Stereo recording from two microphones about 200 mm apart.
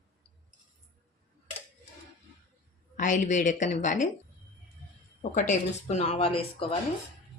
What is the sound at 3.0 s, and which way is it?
Speech, 40° left (ahead or behind).